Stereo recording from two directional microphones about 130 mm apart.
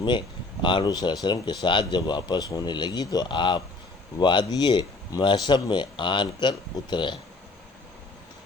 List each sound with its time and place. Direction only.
0.6 s speech: 35° left (ahead or behind)